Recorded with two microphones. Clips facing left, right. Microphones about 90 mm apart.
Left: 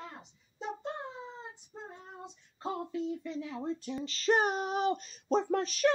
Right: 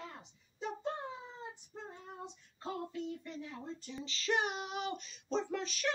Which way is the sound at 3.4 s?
90° left.